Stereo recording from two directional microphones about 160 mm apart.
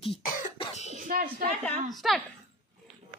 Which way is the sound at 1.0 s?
60° right (ahead or behind).